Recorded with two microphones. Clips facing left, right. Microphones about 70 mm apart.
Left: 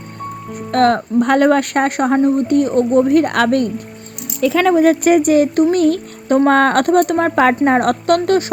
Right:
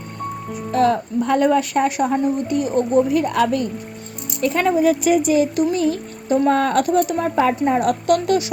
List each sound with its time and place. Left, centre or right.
0.5 s speech: left
4.8 s speech: left